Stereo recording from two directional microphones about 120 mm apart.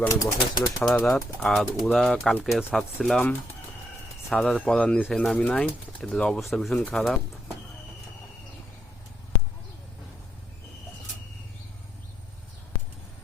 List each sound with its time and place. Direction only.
0.0 s speech: 25° left (ahead or behind)
0.9 s speech: 10° left (ahead or behind)
7.0 s speech: centre (ahead or behind)